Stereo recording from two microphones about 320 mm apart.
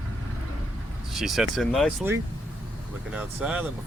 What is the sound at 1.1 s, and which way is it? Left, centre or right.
Speech, centre.